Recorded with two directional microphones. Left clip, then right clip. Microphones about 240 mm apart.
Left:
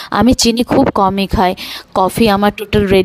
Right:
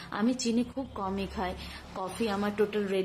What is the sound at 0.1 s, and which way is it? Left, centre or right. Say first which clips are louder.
A woman's voice: left 18 dB; left.